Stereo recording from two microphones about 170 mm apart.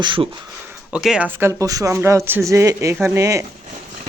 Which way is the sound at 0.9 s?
5° right (ahead or behind).